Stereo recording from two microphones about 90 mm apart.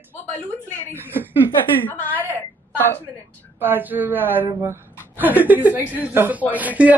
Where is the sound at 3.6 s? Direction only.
20° right (ahead or behind).